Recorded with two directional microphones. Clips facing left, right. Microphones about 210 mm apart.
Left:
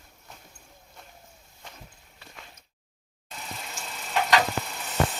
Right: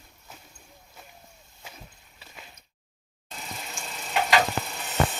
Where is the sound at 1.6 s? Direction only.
5° right (ahead or behind).